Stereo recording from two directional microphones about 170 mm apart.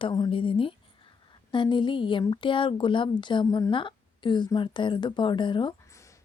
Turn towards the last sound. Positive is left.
turn(degrees=30)  # may be behind; listen again after turning